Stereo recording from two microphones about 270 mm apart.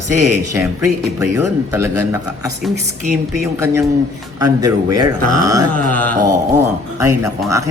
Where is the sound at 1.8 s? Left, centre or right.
Centre.